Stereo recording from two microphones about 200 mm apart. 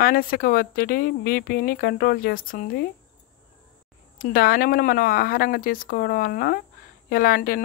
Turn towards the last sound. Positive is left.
turn(degrees=45)  # may be behind; listen again after turning